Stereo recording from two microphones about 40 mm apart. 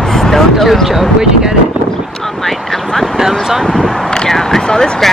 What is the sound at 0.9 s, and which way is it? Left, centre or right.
Speech, centre.